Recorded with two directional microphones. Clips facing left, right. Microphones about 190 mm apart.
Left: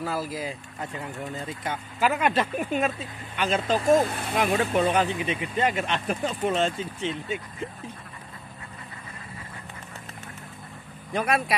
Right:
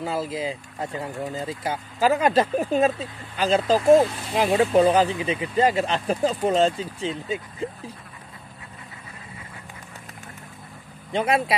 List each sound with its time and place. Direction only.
0.0 s speech: 25° right (ahead or behind)
11.1 s speech: 25° right (ahead or behind)